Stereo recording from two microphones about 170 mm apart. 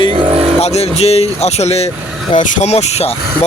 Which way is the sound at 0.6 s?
40° left (ahead or behind).